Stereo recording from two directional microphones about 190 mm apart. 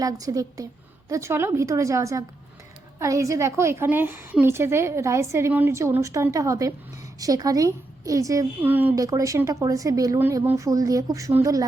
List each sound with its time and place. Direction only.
0.0 s a woman's voice: 20° right (ahead or behind)